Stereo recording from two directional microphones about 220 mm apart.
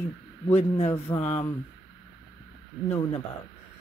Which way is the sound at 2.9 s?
20° left (ahead or behind).